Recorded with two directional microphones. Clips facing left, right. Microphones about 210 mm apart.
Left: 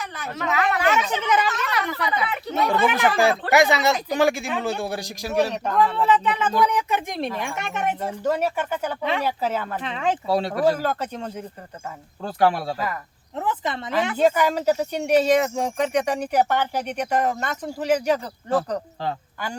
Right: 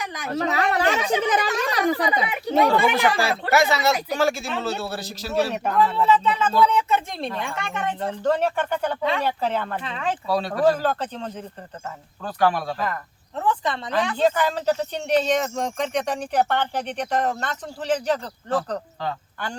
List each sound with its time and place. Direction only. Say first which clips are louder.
0.0 s a sound: right 2 dB; 15° right (ahead or behind)
0.3 s a woman's voice: right 1 dB; 35° right (ahead or behind)
2.8 s speech: even; centre (ahead or behind)
3.5 s speech: right 2 dB; 15° left (ahead or behind)
5.5 s speech: even; 5° right (ahead or behind)
6.1 s speech: right 1 dB; 15° left (ahead or behind)
7.9 s speech: right 1 dB; 10° left (ahead or behind)
9.8 s speech: left 3 dB; 25° left (ahead or behind)
10.8 s speech: right 1 dB; 10° left (ahead or behind)
12.2 s speech: left 1 dB; 25° left (ahead or behind)
12.8 s speech: right 1 dB; 10° left (ahead or behind)
13.4 s speech: right 2 dB; 20° left (ahead or behind)
14.2 s speech: left 3 dB; 10° left (ahead or behind)